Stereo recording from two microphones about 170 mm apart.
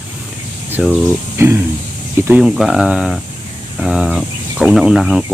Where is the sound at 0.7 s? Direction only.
10° right (ahead or behind).